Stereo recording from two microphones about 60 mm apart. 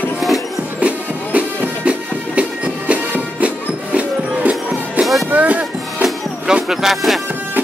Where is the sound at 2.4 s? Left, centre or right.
Right.